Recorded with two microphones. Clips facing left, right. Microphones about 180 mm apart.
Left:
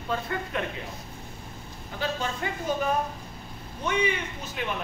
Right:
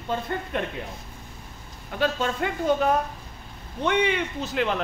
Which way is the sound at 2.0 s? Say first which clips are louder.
Right 5 dB; 60° right (ahead or behind).